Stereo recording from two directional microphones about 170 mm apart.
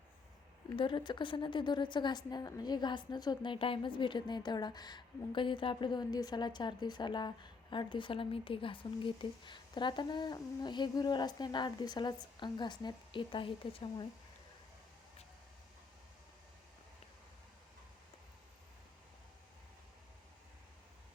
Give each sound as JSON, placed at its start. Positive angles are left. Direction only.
{"t": 0.8, "sound": "a woman's voice", "side_deg": 30}